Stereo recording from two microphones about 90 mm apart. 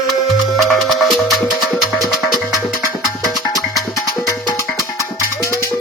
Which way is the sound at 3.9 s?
35° left (ahead or behind).